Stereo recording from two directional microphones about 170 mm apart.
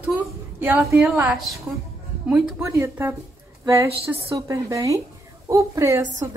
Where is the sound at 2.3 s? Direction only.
15° right (ahead or behind).